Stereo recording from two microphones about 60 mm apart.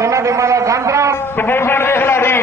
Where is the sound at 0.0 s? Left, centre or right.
Right.